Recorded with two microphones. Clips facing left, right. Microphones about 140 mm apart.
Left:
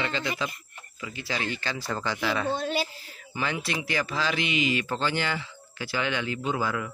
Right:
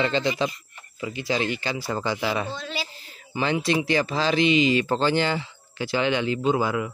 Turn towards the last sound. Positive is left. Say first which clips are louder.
# right 6 dB
turn(degrees=-20)  # may be behind; listen again after turning